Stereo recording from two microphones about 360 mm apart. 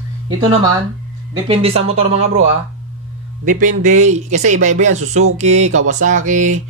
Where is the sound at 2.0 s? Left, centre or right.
Right.